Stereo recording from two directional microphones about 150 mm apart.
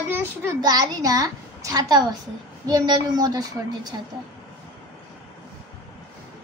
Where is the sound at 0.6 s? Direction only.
25° right (ahead or behind).